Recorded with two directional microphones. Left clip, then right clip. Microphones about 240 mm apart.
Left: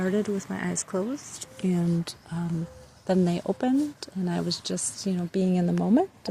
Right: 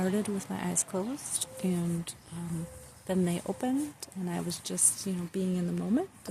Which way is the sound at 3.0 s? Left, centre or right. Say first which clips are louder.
Left 6 dB; centre.